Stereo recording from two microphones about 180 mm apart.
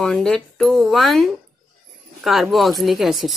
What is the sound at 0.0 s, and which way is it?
Speech, 5° left (ahead or behind).